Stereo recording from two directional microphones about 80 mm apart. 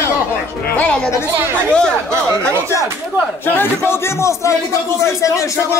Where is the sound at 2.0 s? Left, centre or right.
Right.